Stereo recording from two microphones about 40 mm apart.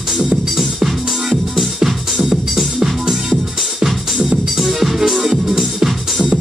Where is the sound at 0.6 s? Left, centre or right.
Centre.